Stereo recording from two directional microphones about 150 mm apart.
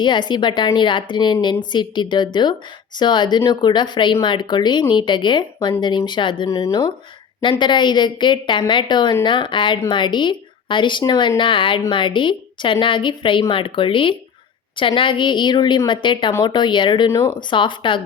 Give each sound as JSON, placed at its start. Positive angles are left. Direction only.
{"t": 0.0, "sound": "a woman's voice", "side_deg": 30}
{"t": 17.1, "sound": "speech", "side_deg": 20}
{"t": 17.5, "sound": "a woman's voice", "side_deg": 35}